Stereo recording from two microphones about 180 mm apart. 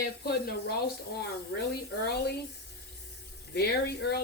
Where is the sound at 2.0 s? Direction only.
60° left (ahead or behind).